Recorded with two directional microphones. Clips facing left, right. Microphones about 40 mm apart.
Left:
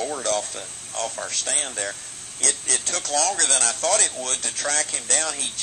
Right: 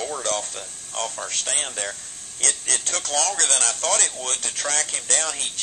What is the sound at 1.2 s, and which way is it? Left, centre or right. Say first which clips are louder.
Speech: even; right.